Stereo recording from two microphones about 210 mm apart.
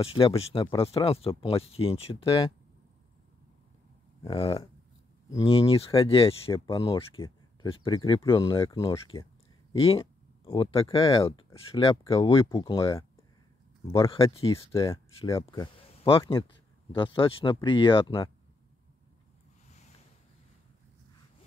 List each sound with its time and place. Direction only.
0.0 s speech: 25° left (ahead or behind)
4.2 s speech: 25° left (ahead or behind)